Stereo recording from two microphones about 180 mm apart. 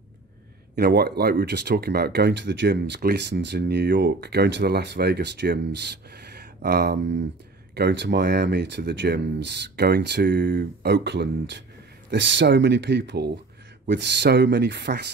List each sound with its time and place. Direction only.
0.7 s speech: 65° right (ahead or behind)